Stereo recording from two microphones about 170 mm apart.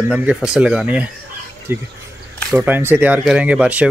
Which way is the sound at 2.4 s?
Centre (ahead or behind).